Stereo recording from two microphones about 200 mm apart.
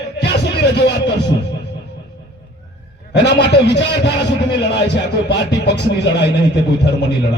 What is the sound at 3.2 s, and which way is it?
A man's voice, 60° left (ahead or behind).